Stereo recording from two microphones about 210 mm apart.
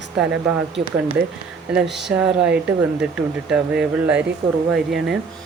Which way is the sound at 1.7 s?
Centre (ahead or behind).